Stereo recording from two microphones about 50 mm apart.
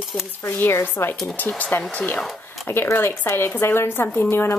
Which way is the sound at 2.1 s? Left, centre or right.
Centre.